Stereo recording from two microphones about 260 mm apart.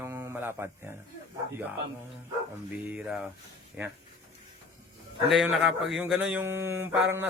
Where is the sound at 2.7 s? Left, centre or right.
Centre.